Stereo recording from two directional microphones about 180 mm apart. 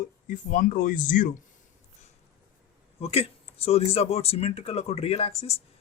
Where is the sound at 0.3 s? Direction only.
45° left (ahead or behind).